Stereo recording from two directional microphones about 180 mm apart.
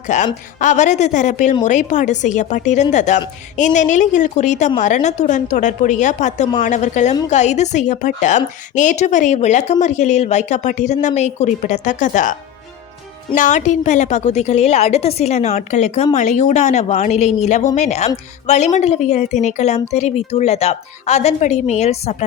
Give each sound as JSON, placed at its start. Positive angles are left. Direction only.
{"t": 0.1, "sound": "a woman's voice", "side_deg": 40}